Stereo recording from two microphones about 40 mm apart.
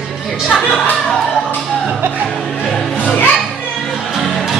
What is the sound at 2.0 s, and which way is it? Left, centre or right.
Music, right.